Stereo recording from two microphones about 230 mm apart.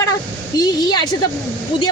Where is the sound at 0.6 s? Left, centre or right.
Centre.